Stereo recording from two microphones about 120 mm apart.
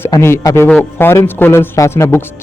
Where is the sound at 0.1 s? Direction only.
25° left (ahead or behind).